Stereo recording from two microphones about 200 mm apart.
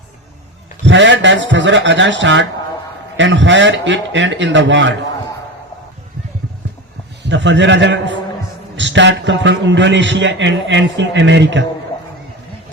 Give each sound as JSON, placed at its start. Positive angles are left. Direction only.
{"t": 0.9, "sound": "a man's voice", "side_deg": -65}
{"t": 7.2, "sound": "a man's voice", "side_deg": -65}